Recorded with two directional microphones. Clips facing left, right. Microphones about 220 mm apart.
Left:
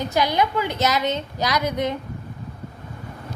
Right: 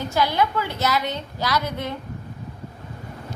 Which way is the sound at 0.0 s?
20° left (ahead or behind).